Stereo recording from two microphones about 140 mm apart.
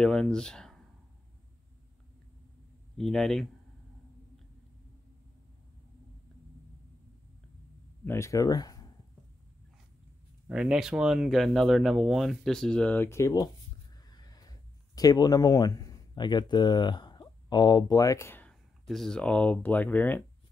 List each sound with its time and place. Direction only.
0.0 s speech: 5° left (ahead or behind)
3.0 s speech: 5° left (ahead or behind)
8.0 s speech: 20° left (ahead or behind)
10.5 s speech: 5° right (ahead or behind); by 13.5 s 25° left (ahead or behind)
14.0 s a sound: 30° left (ahead or behind)
18.5 s speech: 5° left (ahead or behind)